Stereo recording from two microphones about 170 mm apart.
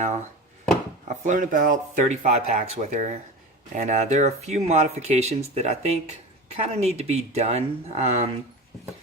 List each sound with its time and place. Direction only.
1.0 s speech: 45° right (ahead or behind)